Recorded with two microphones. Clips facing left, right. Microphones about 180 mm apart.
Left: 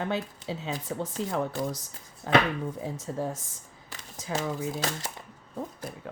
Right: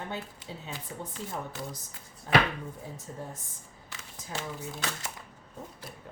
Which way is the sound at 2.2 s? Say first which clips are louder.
Left 3 dB; 90° left.